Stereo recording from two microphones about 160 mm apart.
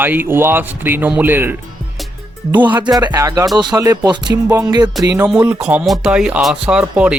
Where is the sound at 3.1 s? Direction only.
20° right (ahead or behind).